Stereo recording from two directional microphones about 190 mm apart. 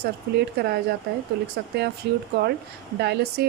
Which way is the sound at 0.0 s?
55° right (ahead or behind).